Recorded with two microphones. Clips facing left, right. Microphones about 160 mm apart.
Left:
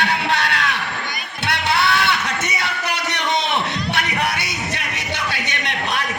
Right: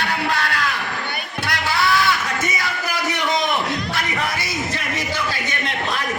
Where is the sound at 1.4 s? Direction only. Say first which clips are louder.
Left 2 dB; 65° left (ahead or behind).